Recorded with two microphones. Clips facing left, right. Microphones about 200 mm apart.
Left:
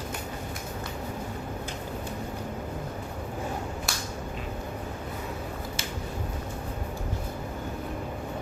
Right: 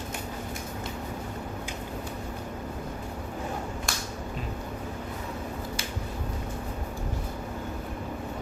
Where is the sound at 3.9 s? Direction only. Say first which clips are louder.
Right 1 dB; 5° left (ahead or behind).